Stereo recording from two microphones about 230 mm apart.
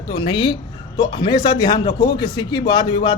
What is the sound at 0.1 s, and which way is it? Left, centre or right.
Speech, centre.